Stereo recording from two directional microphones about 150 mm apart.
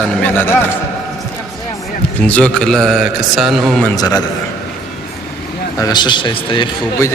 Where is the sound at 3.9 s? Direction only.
25° left (ahead or behind).